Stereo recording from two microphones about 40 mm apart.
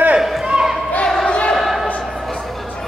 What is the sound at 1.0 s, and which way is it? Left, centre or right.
Battle cry, centre.